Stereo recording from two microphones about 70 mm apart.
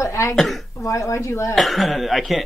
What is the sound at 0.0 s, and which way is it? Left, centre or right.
Throat clearing, left.